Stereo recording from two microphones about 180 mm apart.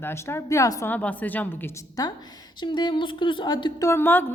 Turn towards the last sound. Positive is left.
turn(degrees=10)  # may be behind; listen again after turning